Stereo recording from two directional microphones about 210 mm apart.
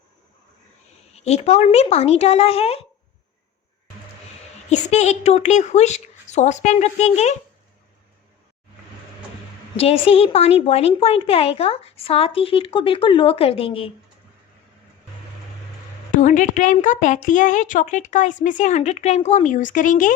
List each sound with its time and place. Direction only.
1.1 s a woman's voice: 30° left (ahead or behind)
4.7 s a woman's voice: 35° left (ahead or behind)
9.7 s a woman's voice: 30° left (ahead or behind)
16.1 s a woman's voice: 35° left (ahead or behind)